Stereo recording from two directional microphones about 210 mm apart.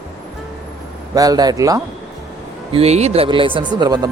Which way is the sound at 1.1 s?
15° right (ahead or behind).